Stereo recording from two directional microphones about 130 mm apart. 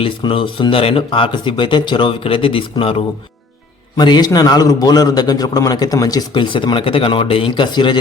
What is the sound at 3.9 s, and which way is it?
A man's voice, 35° left (ahead or behind).